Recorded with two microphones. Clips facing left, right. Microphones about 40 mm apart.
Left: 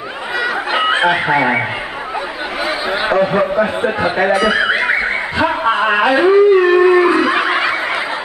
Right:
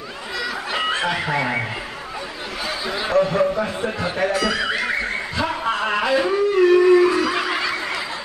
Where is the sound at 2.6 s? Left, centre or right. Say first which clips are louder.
Left 7 dB; left.